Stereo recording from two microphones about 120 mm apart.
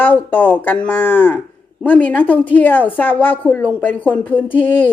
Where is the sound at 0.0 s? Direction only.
15° left (ahead or behind).